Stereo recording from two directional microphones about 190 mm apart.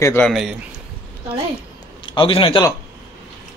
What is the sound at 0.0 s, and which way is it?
Speech, 10° left (ahead or behind).